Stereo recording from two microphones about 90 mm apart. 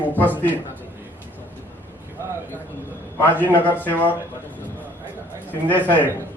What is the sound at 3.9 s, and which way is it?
Speech, 20° left (ahead or behind).